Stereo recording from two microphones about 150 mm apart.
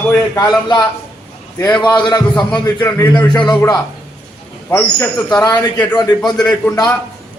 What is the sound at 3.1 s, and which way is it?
A man's voice, 30° left (ahead or behind).